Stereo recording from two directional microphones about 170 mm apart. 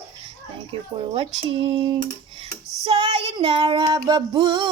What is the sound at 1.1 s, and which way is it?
Speech, 30° right (ahead or behind).